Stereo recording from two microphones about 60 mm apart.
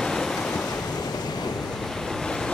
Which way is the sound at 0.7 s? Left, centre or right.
Left.